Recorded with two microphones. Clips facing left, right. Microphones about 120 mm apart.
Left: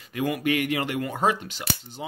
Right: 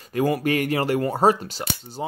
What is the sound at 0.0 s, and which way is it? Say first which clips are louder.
Speech: right 4 dB; 40° right (ahead or behind).